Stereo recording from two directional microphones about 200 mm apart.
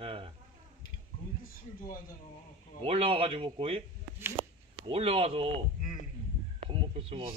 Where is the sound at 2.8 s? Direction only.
25° right (ahead or behind).